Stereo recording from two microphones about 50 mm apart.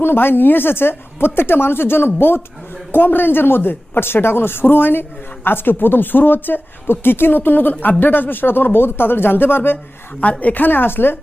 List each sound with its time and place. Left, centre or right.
0.0 s speech: left